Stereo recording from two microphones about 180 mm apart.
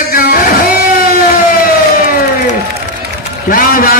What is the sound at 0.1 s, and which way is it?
Music, 55° left (ahead or behind).